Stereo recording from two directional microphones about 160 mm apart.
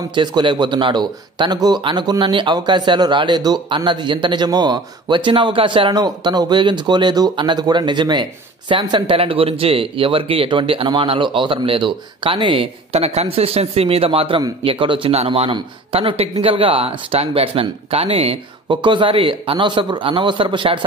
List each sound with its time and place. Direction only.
0.1 s speech: 30° right (ahead or behind)